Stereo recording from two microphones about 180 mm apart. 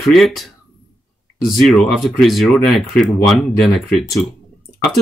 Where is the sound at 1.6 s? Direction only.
Centre (ahead or behind).